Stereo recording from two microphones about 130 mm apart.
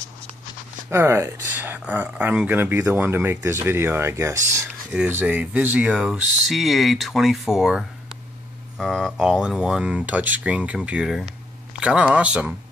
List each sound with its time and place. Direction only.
0.8 s speech: 20° right (ahead or behind)
5.2 s speech: 10° right (ahead or behind)